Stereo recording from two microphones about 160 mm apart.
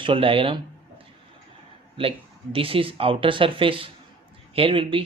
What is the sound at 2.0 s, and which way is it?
Speech, 35° right (ahead or behind).